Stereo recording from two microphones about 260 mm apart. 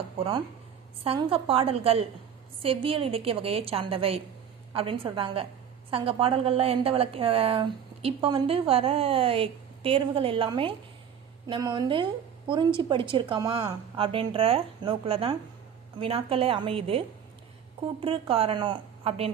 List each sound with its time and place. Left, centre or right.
1.0 s a woman's voice: right
18.0 s a woman's voice: right